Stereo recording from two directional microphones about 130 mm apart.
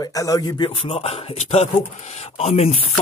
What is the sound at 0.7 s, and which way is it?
Speech, 50° left (ahead or behind).